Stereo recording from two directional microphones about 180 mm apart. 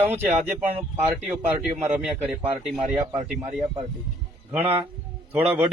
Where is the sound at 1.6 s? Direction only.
40° right (ahead or behind).